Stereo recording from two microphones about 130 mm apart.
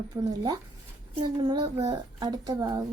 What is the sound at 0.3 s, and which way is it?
A child's voice, 30° right (ahead or behind).